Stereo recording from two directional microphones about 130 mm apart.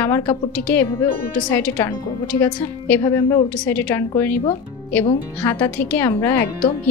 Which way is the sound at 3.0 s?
25° left (ahead or behind).